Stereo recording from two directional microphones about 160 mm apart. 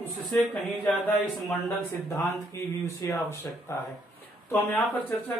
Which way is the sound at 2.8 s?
20° left (ahead or behind).